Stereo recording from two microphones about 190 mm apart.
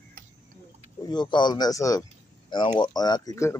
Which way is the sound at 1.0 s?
20° left (ahead or behind).